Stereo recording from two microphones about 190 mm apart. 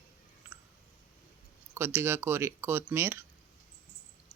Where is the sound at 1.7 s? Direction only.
10° right (ahead or behind).